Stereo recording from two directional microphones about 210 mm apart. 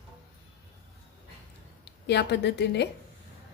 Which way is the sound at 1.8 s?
50° left (ahead or behind).